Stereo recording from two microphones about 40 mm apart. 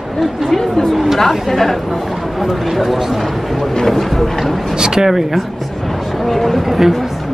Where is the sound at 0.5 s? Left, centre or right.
Centre.